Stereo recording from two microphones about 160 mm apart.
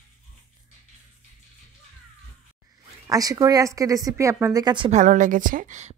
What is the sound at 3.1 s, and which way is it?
Speech, 20° right (ahead or behind).